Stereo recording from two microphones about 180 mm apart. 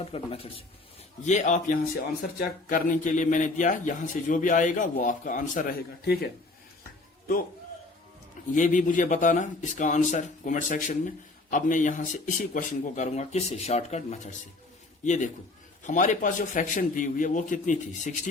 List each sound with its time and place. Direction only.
0.0 s a man's voice: 30° left (ahead or behind)
1.2 s a man's voice: 40° left (ahead or behind); by 6.3 s 60° left (ahead or behind)
8.5 s a man's voice: 45° left (ahead or behind)